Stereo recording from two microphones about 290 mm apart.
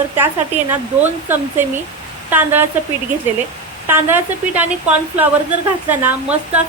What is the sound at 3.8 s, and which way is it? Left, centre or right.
A woman's voice, centre.